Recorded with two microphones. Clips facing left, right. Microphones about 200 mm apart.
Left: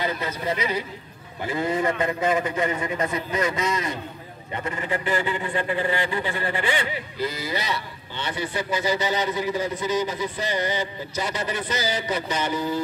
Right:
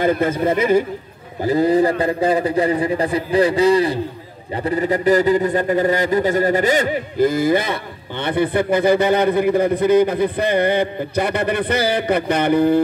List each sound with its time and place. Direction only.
0.0 s speech: 50° right (ahead or behind)
1.4 s a man's voice: 35° right (ahead or behind); by 12.8 s 60° right (ahead or behind)